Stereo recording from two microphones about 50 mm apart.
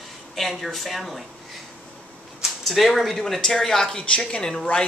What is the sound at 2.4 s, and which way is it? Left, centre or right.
Speech, centre.